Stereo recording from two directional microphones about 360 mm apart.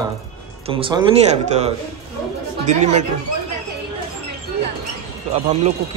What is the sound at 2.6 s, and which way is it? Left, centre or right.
Speech, centre.